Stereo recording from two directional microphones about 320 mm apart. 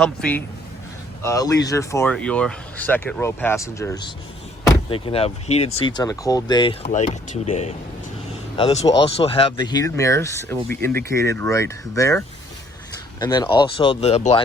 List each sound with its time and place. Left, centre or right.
0.0 s a man's voice: centre